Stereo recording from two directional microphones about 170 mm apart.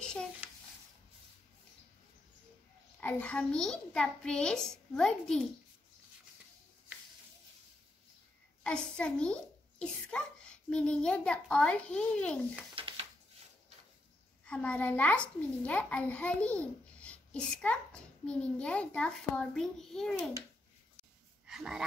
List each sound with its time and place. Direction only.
0.0 s a sound: 5° left (ahead or behind)
3.0 s a child's voice: 10° left (ahead or behind)
8.6 s a child's voice: 5° left (ahead or behind)
12.7 s a sound: 30° right (ahead or behind)
14.4 s a child's voice: 5° left (ahead or behind)
21.5 s speech: 5° right (ahead or behind)